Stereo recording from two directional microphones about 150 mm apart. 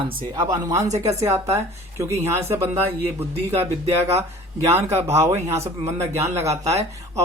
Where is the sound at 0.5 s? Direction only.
20° right (ahead or behind).